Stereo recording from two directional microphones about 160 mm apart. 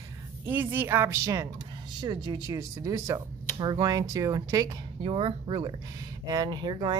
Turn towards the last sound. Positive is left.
turn(degrees=-30)  # may be behind; listen again after turning